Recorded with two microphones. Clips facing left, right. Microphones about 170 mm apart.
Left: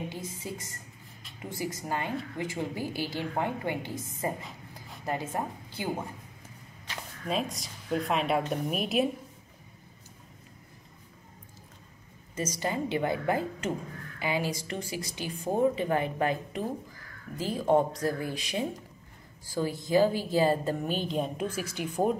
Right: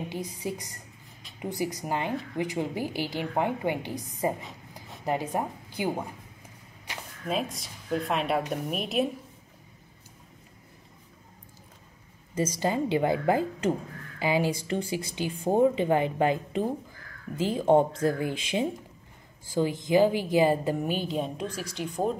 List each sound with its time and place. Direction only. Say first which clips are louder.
0.1 s a woman's voice: right 5 dB; 15° right (ahead or behind)
4.4 s writing: right 1 dB; centre (ahead or behind)
5.0 s a woman's voice: right 4 dB; 15° right (ahead or behind)
7.2 s a woman's voice: right 1 dB; centre (ahead or behind)
12.4 s a woman's voice: right 4 dB; 30° right (ahead or behind); by 21.2 s 10° right (ahead or behind)
21.2 s a woman's voice: left 1 dB; 5° left (ahead or behind)